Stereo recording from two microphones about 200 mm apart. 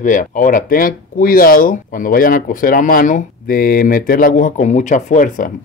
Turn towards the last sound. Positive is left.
turn(degrees=40)  # may be behind; listen again after turning